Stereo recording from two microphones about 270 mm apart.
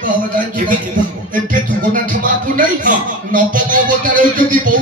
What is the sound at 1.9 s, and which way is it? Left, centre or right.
Speech, right.